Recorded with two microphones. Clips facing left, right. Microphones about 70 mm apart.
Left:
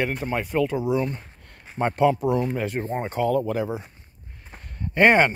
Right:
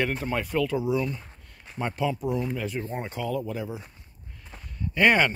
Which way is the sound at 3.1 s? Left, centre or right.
Left.